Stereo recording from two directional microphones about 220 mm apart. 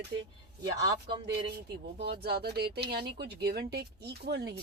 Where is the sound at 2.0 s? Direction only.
45° right (ahead or behind).